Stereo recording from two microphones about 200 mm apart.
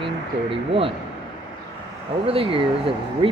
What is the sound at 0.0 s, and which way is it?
Speech, 25° right (ahead or behind).